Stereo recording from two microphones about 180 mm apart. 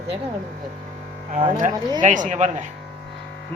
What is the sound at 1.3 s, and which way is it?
Speech, 45° right (ahead or behind).